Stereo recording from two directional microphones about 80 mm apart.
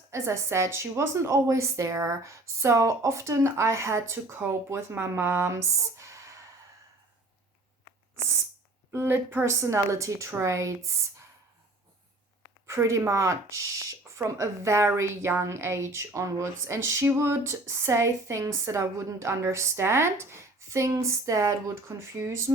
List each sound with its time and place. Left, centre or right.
0.1 s a woman's voice: right
8.9 s a woman's voice: right
12.6 s a woman's voice: right